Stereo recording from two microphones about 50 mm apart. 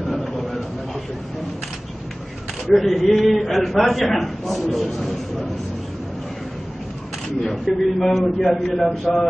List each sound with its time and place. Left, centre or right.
0.2 s a sound: centre
2.6 s a man's voice: centre
7.4 s a man's voice: centre